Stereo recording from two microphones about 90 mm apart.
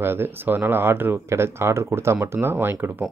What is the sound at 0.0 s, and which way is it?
Speech, 25° right (ahead or behind).